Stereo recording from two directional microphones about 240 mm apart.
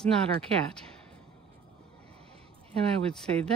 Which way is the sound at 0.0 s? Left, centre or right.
Centre.